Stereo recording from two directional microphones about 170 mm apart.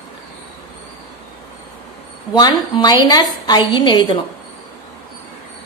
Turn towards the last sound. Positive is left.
turn(degrees=25)  # may be behind; listen again after turning